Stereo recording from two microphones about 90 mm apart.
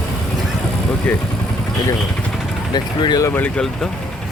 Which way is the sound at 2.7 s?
55° left (ahead or behind).